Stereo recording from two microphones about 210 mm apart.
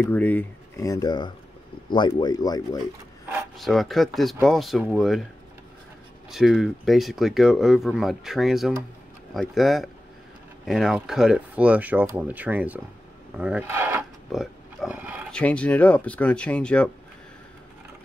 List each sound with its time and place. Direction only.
0.0 s speech: 10° left (ahead or behind)
3.5 s speech: centre (ahead or behind)
6.3 s speech: centre (ahead or behind)
13.4 s pig: 5° right (ahead or behind)
15.3 s speech: 5° left (ahead or behind)